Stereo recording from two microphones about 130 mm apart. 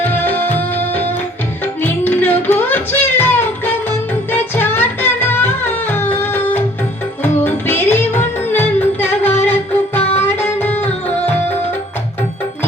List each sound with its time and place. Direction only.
0.0 s music: 15° left (ahead or behind)